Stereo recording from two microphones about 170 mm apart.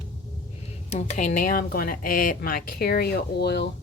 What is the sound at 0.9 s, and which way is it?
Speech, 45° left (ahead or behind).